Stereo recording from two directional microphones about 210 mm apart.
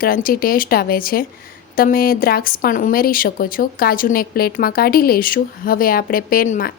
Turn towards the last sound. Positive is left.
turn(degrees=40)  # may be behind; listen again after turning